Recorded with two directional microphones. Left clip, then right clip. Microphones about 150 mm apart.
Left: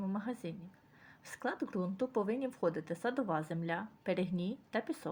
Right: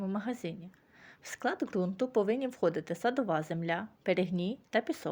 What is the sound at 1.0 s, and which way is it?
Speech, 50° right (ahead or behind).